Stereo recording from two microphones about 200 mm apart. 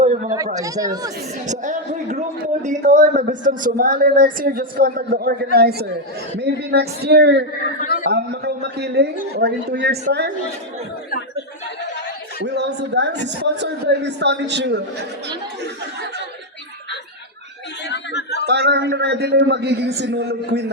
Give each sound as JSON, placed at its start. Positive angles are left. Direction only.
{"t": 0.0, "sound": "a sound", "side_deg": -35}
{"t": 0.3, "sound": "speech", "side_deg": -15}
{"t": 1.5, "sound": "a man's voice", "side_deg": -40}
{"t": 7.8, "sound": "a man's voice", "side_deg": 40}
{"t": 8.0, "sound": "a man's voice", "side_deg": -55}
{"t": 12.5, "sound": "a man's voice", "side_deg": -60}
{"t": 17.8, "sound": "a sound", "side_deg": 60}
{"t": 18.4, "sound": "a man's voice", "side_deg": -55}